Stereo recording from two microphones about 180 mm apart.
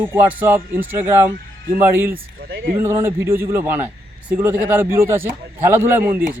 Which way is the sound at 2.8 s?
15° right (ahead or behind).